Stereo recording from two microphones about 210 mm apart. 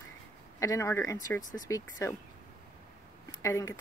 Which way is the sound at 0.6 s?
15° left (ahead or behind).